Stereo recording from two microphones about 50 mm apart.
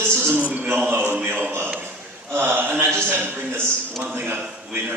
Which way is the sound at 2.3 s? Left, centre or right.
Right.